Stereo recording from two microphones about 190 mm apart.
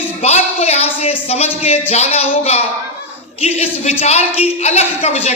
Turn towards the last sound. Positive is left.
turn(degrees=35)  # may be behind; listen again after turning